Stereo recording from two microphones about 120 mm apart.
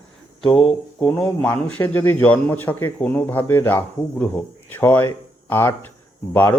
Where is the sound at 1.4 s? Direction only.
5° left (ahead or behind).